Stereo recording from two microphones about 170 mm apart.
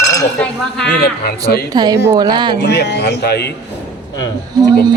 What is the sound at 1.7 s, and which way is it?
Speech, 25° right (ahead or behind).